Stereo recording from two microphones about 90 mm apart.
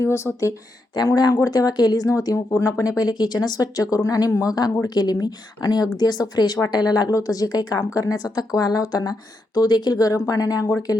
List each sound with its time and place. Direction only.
0.0 s speech: 30° left (ahead or behind)